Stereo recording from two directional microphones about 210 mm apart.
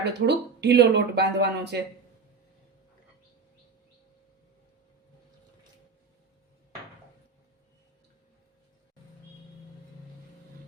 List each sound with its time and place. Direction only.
0.0 s speech: 55° right (ahead or behind)